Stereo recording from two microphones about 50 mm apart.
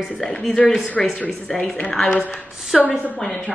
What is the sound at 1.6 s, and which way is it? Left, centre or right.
Speech, centre.